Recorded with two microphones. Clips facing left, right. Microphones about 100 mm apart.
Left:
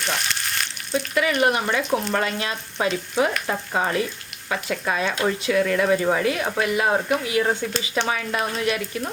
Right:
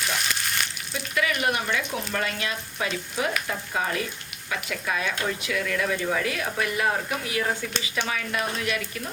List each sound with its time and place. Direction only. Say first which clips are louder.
0.0 s frying: left 2 dB; centre (ahead or behind)
0.9 s speech: left 6 dB; 35° left (ahead or behind)